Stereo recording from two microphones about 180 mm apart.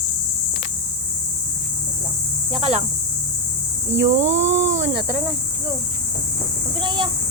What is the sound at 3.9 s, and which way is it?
Speech, 90° right.